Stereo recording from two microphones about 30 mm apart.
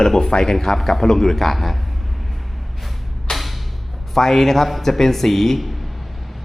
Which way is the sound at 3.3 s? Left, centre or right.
Left.